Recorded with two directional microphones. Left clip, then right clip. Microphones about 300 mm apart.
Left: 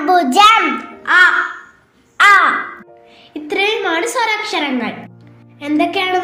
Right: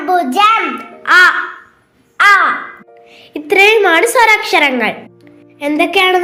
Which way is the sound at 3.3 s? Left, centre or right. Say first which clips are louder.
Right 8 dB; right.